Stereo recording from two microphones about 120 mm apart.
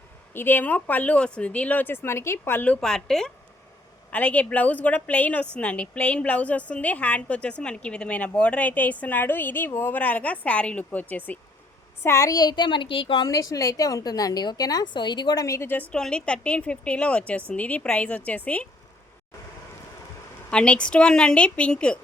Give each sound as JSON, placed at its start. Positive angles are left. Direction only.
{"t": 0.3, "sound": "a woman's voice", "side_deg": 15}
{"t": 12.0, "sound": "a child's voice", "side_deg": 25}
{"t": 13.2, "sound": "a woman's voice", "side_deg": 30}
{"t": 20.5, "sound": "a woman's voice", "side_deg": 10}